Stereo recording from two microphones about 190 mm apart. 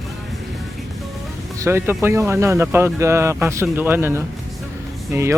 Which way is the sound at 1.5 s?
15° right (ahead or behind).